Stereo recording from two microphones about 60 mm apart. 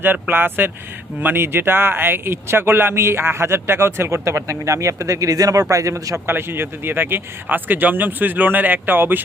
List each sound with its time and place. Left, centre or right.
0.0 s speech: right
6.2 s speech: right